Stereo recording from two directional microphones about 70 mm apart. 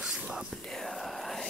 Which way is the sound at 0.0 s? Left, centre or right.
Centre.